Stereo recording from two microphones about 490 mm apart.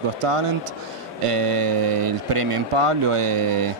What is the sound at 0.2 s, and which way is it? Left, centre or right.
Speech, right.